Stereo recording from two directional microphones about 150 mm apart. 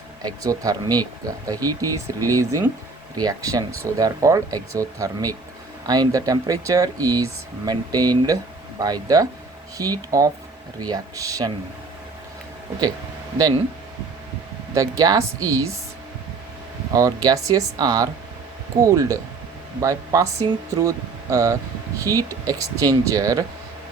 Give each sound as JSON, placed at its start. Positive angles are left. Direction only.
{"t": 0.2, "sound": "speech", "side_deg": -25}
{"t": 14.7, "sound": "speech", "side_deg": -25}
{"t": 16.9, "sound": "speech", "side_deg": -25}